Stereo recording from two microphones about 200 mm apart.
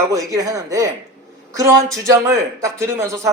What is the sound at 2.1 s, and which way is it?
Speech, 15° right (ahead or behind).